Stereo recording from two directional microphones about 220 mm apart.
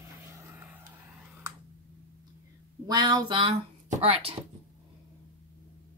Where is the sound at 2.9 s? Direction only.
20° right (ahead or behind).